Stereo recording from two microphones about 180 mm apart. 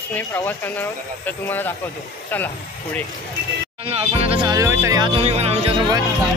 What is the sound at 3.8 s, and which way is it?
Speech, 35° right (ahead or behind).